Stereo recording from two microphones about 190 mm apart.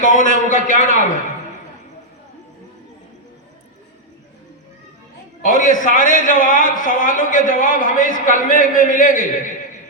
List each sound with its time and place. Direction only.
0.0 s a man's voice: 45° left (ahead or behind)
5.4 s a man's voice: 45° left (ahead or behind)